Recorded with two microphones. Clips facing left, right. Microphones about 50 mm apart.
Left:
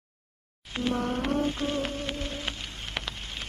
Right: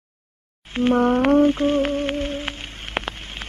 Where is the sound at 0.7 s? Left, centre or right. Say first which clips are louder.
Right 11 dB; right.